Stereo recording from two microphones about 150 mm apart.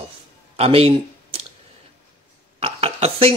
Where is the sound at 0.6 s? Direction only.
40° right (ahead or behind).